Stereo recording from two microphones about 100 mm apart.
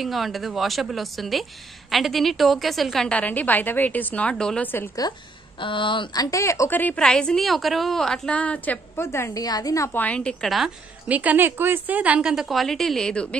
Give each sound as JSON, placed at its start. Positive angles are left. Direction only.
{"t": 0.0, "sound": "a woman's voice", "side_deg": 0}
{"t": 3.1, "sound": "a woman's voice", "side_deg": 15}
{"t": 5.6, "sound": "speech", "side_deg": 55}
{"t": 6.1, "sound": "speech", "side_deg": 35}
{"t": 6.7, "sound": "a woman's voice", "side_deg": 15}
{"t": 9.4, "sound": "speech", "side_deg": 40}
{"t": 9.9, "sound": "a woman's voice", "side_deg": 15}
{"t": 11.1, "sound": "a woman's voice", "side_deg": -15}